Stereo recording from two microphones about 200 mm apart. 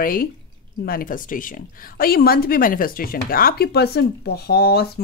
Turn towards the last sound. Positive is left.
turn(degrees=55)  # may be behind; listen again after turning